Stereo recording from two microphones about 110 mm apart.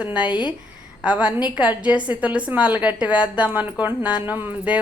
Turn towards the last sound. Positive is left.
turn(degrees=-15)  # may be behind; listen again after turning